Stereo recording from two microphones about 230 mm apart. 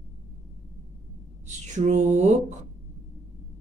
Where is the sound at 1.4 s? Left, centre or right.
Right.